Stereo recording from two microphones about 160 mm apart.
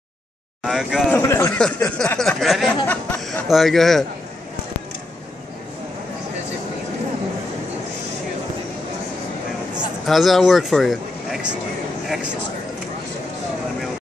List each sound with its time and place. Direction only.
0.7 s speech: centre (ahead or behind)
1.1 s a man's voice: 10° left (ahead or behind)
1.6 s a sound: 5° left (ahead or behind)
3.4 s speech: centre (ahead or behind)
10.0 s a man's voice: centre (ahead or behind)